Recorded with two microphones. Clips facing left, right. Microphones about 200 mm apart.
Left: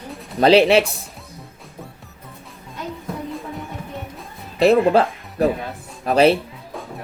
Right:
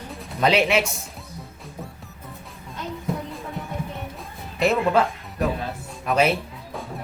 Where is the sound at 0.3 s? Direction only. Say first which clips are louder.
Left 7 dB; 35° left (ahead or behind).